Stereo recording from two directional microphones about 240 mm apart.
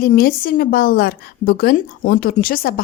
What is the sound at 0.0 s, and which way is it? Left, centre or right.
Speech, left.